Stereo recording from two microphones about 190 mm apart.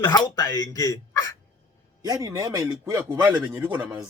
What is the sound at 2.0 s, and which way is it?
Speech, 20° right (ahead or behind).